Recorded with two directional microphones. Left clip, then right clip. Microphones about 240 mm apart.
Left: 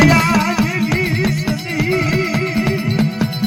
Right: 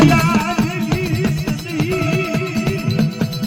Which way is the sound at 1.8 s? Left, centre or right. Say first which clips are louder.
Left 2 dB; left.